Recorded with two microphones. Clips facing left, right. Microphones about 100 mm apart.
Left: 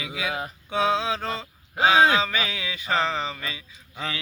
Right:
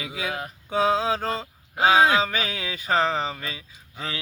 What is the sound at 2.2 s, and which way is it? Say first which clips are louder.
Mantra: right 1 dB; 40° right (ahead or behind).